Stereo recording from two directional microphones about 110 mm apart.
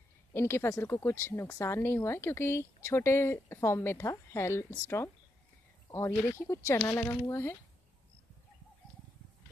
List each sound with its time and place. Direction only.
0.3 s speech: 20° left (ahead or behind)